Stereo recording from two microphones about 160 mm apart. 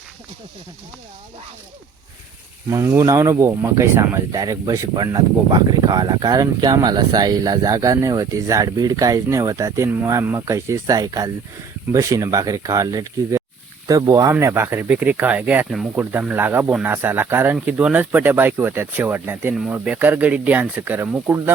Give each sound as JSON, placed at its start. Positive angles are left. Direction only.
{"t": 2.6, "sound": "speech", "side_deg": -15}